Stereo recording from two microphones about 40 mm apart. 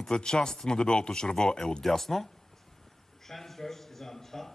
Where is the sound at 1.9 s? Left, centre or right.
Centre.